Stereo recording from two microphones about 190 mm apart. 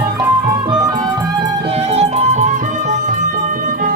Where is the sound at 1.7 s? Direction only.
35° right (ahead or behind).